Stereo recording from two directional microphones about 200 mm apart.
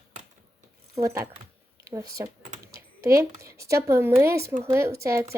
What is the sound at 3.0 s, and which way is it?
Speech, 15° right (ahead or behind).